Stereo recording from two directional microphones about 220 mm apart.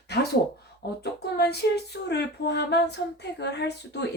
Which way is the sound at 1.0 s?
50° left (ahead or behind).